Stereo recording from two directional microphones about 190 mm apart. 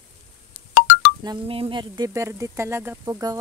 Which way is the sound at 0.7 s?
60° left (ahead or behind).